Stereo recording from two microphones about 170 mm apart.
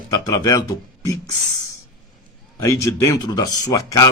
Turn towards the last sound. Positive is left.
turn(degrees=20)  # may be behind; listen again after turning